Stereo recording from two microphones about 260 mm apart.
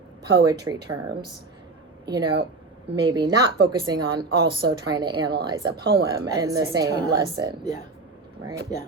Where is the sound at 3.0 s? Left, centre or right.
Centre.